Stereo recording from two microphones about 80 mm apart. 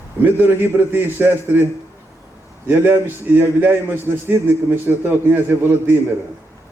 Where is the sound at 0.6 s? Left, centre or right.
Right.